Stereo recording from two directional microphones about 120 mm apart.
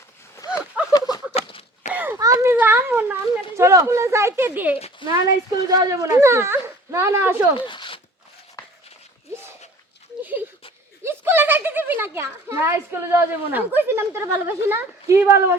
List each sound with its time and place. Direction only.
0.3 s clip-clop: 25° left (ahead or behind)
0.9 s horse: 35° left (ahead or behind)
1.3 s dog: 55° left (ahead or behind)
1.9 s a sound: 15° right (ahead or behind)
2.1 s children playing: 25° right (ahead or behind)
3.5 s speech: 25° right (ahead or behind)
5.0 s speech: 35° right (ahead or behind)
7.5 s zipper: 45° left (ahead or behind)
11.0 s a child's voice: 20° right (ahead or behind)